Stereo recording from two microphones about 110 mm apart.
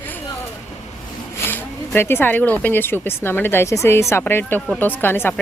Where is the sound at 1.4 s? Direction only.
20° left (ahead or behind).